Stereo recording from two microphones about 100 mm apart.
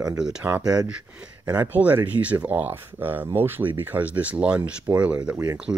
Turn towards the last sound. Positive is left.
turn(degrees=-40)  # may be behind; listen again after turning